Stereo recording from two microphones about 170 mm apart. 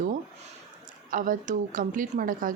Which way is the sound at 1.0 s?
50° right (ahead or behind).